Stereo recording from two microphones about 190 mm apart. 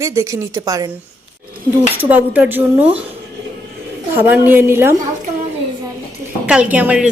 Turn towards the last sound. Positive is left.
turn(degrees=-5)  # may be behind; listen again after turning